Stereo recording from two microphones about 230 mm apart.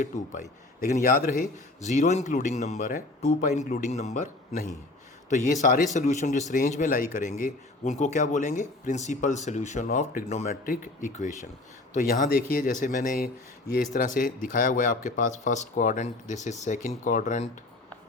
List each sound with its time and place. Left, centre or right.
0.0 s speech: left